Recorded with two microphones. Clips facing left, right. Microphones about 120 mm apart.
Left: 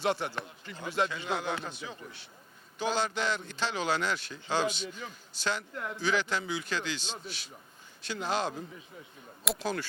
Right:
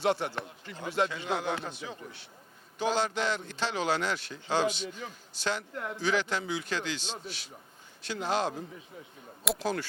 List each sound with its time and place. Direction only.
0.0 s speech: 45° right (ahead or behind)
2.7 s speech: 50° right (ahead or behind)
4.9 s speech: 35° right (ahead or behind)
5.4 s speech: 60° right (ahead or behind)
5.7 s speech: 35° right (ahead or behind)
6.1 s speech: 55° right (ahead or behind)
8.0 s speech: 50° right (ahead or behind)
9.6 s speech: 45° right (ahead or behind)